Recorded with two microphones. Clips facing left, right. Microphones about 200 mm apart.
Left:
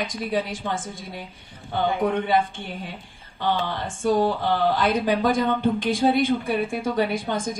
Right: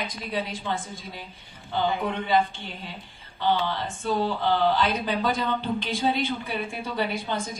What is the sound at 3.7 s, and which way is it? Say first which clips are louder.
Speech: left 5 dB; 50° left (ahead or behind).